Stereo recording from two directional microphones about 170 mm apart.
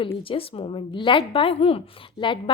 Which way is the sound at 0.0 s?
30° left (ahead or behind).